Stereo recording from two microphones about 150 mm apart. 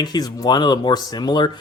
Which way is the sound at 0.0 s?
25° left (ahead or behind).